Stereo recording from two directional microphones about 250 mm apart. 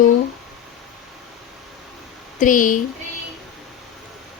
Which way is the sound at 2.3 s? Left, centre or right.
Left.